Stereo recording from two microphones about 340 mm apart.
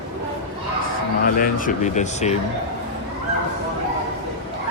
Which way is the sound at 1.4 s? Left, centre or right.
Left.